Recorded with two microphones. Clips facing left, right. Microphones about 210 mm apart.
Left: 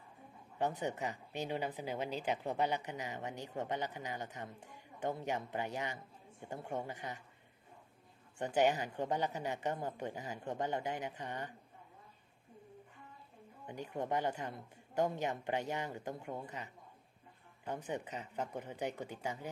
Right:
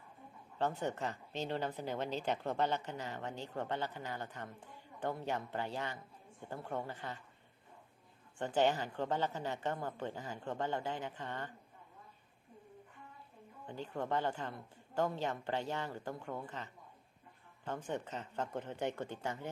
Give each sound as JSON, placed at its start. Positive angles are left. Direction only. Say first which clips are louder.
{"t": 0.8, "sound": "speech", "louder": "even", "side_deg": 15}
{"t": 8.4, "sound": "speech", "louder": "even", "side_deg": 15}
{"t": 13.7, "sound": "speech", "louder": "even", "side_deg": 15}
{"t": 17.8, "sound": "speech", "louder": "right 1 dB", "side_deg": 15}